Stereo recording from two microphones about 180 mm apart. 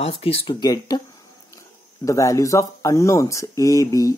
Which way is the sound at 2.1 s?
15° left (ahead or behind).